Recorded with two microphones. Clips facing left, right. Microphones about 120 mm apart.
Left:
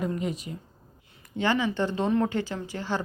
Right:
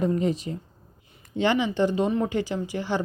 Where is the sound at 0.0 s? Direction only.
30° right (ahead or behind).